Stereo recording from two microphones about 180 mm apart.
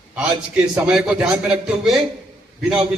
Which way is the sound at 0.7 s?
5° right (ahead or behind).